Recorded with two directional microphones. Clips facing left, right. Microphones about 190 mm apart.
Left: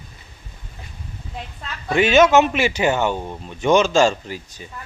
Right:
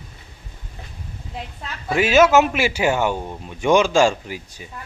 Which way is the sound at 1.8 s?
5° right (ahead or behind).